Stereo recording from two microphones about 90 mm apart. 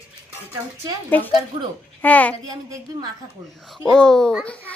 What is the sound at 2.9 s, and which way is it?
Speech, 45° right (ahead or behind).